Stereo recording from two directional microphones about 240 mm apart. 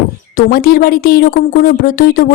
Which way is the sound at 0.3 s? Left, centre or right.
Left.